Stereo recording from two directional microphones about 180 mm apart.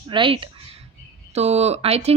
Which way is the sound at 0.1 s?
30° right (ahead or behind).